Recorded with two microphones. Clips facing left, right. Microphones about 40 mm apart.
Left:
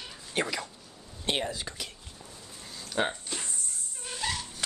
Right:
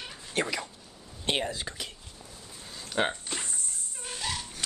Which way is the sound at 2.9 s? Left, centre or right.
Right.